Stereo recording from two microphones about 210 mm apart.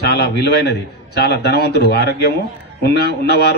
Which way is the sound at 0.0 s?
50° left (ahead or behind).